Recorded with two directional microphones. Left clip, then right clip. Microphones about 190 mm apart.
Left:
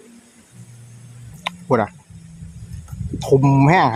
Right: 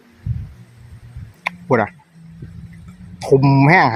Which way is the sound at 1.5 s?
Centre (ahead or behind).